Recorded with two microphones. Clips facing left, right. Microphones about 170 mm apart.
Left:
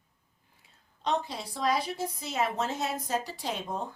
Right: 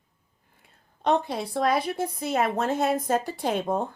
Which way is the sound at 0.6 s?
55° right (ahead or behind).